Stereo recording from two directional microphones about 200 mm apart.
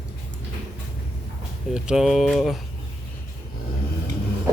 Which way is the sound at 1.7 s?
5° right (ahead or behind).